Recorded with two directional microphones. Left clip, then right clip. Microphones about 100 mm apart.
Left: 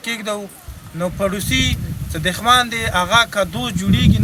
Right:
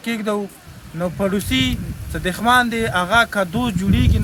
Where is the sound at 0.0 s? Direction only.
25° right (ahead or behind).